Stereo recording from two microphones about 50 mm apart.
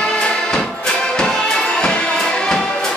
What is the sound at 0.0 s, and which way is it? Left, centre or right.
Music, centre.